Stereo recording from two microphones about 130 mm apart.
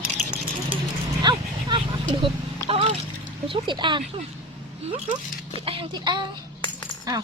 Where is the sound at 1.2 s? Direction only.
35° right (ahead or behind).